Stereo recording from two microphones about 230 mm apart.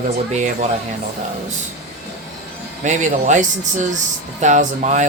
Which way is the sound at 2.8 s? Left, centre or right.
Right.